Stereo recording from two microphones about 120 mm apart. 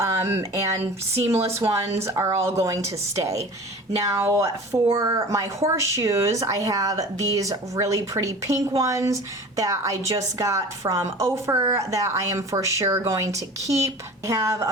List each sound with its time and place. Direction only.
0.0 s a sound: 20° right (ahead or behind)
1.1 s a woman's voice: 20° right (ahead or behind)
4.0 s a woman's voice: 25° right (ahead or behind)